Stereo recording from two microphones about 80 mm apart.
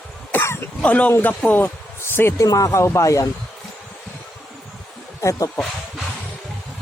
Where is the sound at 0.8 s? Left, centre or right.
Centre.